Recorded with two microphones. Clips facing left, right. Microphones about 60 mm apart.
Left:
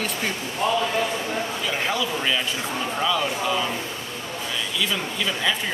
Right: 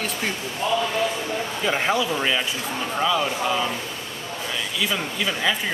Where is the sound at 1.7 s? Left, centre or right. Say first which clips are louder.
Right 5 dB; centre.